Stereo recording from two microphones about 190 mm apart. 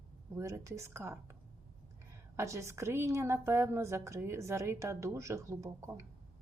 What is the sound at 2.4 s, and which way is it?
A woman's voice, 15° right (ahead or behind).